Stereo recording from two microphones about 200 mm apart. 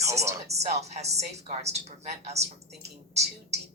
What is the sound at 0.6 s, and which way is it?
A woman's voice, 35° right (ahead or behind).